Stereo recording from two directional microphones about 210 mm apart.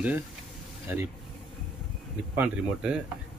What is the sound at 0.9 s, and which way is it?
Speech, 10° right (ahead or behind).